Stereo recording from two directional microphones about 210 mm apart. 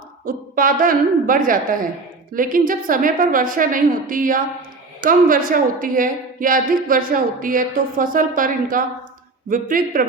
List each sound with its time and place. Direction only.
0.3 s a woman's voice: 40° right (ahead or behind)